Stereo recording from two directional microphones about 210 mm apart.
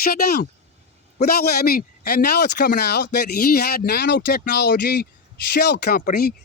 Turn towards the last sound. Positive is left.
turn(degrees=45)  # may be behind; listen again after turning